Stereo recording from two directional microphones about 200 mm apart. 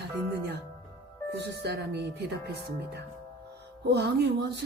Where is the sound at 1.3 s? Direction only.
55° right (ahead or behind).